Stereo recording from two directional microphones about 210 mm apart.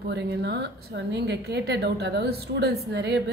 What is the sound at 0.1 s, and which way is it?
A woman's voice, 55° right (ahead or behind).